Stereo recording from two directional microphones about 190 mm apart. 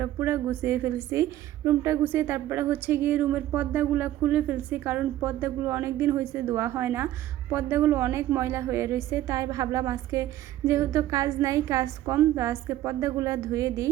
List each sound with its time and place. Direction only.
0.0 s a woman's voice: 10° right (ahead or behind)